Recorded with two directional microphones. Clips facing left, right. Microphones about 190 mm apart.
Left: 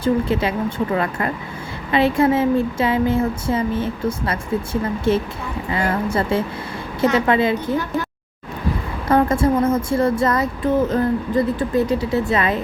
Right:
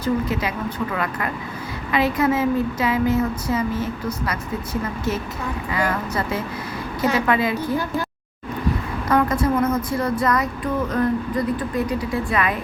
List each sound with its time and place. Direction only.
0.0 s speech: 30° left (ahead or behind)
9.0 s speech: 25° left (ahead or behind)